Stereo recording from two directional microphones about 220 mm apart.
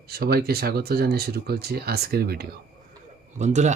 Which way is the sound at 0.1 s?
45° right (ahead or behind).